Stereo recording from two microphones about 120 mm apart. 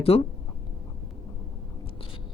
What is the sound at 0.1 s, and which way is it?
Speech, 55° left (ahead or behind).